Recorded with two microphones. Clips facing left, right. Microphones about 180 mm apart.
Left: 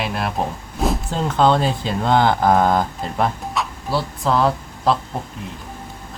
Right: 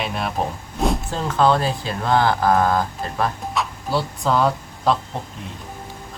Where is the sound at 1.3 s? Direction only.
20° left (ahead or behind).